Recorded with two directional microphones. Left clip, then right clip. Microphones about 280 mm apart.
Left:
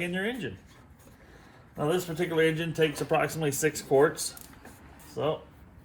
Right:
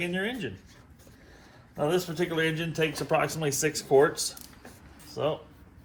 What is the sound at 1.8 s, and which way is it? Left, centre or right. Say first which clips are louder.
Speech: right 1 dB; centre.